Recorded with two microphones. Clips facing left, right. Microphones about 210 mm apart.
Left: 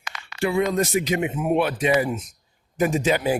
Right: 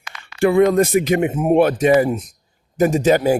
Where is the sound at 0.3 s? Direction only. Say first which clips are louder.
Right 8 dB; 55° right (ahead or behind).